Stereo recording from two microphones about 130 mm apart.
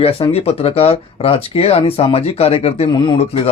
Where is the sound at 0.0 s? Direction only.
50° left (ahead or behind).